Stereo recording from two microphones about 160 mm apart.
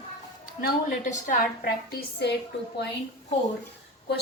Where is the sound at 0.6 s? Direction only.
50° left (ahead or behind); by 2.3 s 75° left (ahead or behind).